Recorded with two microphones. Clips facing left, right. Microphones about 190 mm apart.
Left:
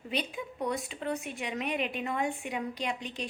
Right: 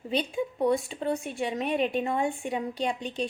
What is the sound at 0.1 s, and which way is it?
A woman's voice, 30° right (ahead or behind).